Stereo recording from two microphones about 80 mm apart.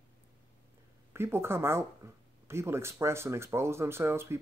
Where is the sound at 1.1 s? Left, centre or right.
Right.